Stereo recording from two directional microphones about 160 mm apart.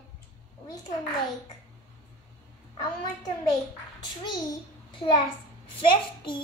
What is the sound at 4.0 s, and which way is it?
Speech, 25° left (ahead or behind).